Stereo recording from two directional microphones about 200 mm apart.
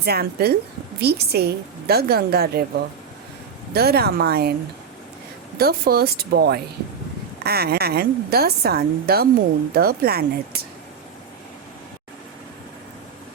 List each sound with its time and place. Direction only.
0.0 s a woman's voice: 50° right (ahead or behind)
3.8 s a woman's voice: 50° right (ahead or behind)
5.5 s a woman's voice: 50° right (ahead or behind)